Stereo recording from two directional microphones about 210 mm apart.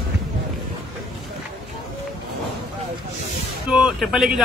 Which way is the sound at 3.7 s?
Centre (ahead or behind).